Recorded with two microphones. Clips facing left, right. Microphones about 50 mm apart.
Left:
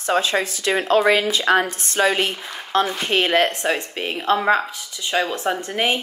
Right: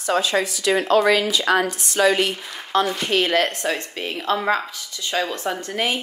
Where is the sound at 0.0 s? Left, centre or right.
Left.